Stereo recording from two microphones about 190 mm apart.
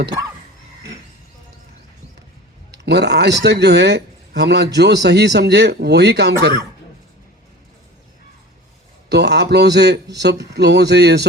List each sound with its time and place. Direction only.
2.8 s a man's voice: 60° right (ahead or behind)
9.0 s a man's voice: 60° right (ahead or behind)